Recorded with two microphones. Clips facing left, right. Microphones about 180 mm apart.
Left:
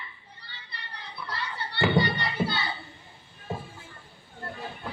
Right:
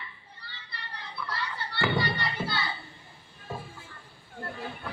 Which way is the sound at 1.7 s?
20° left (ahead or behind).